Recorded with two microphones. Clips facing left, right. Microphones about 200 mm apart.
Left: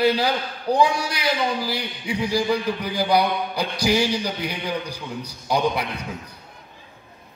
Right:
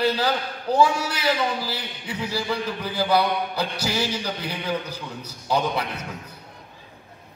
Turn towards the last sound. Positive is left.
turn(degrees=15)  # may be behind; listen again after turning